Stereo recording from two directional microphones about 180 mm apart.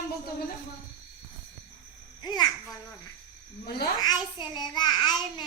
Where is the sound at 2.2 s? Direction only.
25° left (ahead or behind).